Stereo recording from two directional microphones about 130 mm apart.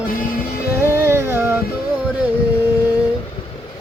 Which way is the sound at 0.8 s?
20° right (ahead or behind).